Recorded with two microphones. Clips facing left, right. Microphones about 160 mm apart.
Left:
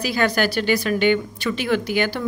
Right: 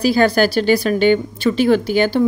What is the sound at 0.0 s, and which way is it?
A woman's voice, 35° right (ahead or behind).